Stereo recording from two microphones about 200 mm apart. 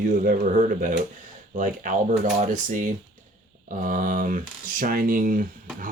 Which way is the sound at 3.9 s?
45° right (ahead or behind).